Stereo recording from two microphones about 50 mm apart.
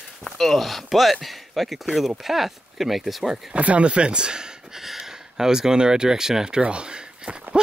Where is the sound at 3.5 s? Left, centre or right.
Right.